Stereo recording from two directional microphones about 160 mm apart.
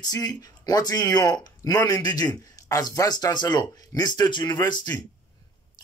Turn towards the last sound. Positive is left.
turn(degrees=25)  # may be behind; listen again after turning